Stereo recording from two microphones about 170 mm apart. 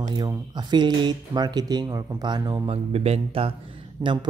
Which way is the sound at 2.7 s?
35° right (ahead or behind).